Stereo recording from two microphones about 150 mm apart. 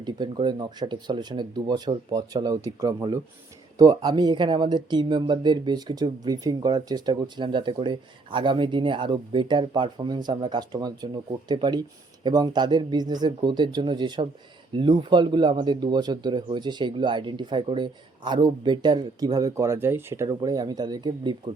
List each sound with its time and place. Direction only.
0.0 s speech: 30° right (ahead or behind)